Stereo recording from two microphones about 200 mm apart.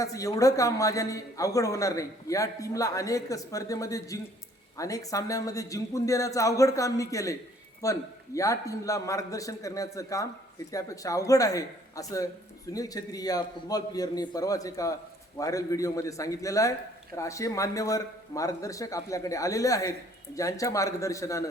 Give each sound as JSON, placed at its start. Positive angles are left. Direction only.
{"t": 0.0, "sound": "a man's voice", "side_deg": 15}